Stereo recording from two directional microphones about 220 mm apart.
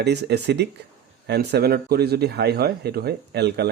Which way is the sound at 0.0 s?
50° right (ahead or behind).